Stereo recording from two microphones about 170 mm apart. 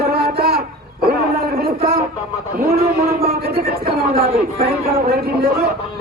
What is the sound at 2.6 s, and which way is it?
A man's voice, 60° right (ahead or behind).